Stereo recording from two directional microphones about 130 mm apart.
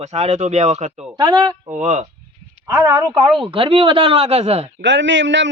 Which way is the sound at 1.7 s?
70° right (ahead or behind).